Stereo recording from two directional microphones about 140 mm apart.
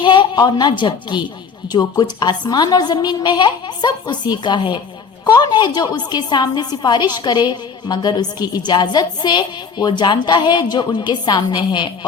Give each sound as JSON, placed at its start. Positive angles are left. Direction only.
{"t": 0.0, "sound": "a woman's voice", "side_deg": 35}